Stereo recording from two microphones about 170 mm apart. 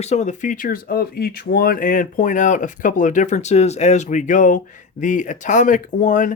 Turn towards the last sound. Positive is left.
turn(degrees=50)  # may be behind; listen again after turning